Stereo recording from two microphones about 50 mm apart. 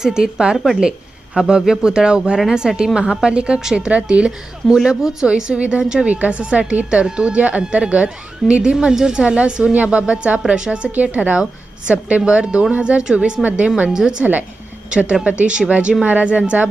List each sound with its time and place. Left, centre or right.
0.0 s speech: centre
0.8 s speech: centre
4.3 s speech: centre
5.8 s speech: centre
6.1 s speech: right